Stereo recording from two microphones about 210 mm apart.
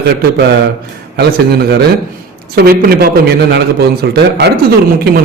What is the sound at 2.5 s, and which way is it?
A man's voice, 45° right (ahead or behind).